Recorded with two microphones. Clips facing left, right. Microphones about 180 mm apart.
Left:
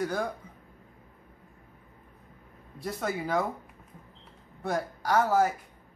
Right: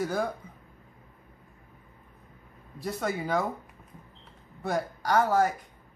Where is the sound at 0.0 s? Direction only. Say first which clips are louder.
Right 1 dB; 5° right (ahead or behind).